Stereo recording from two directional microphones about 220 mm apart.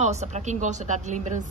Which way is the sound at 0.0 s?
30° right (ahead or behind).